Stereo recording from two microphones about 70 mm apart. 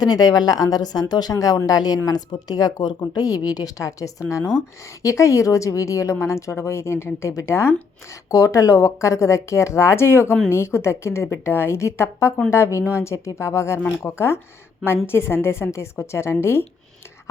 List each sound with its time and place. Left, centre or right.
0.0 s speech: left
3.2 s a woman's voice: left
8.3 s a woman's voice: left